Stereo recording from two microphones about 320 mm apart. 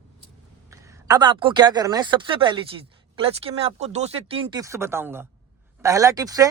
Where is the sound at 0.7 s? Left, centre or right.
Centre.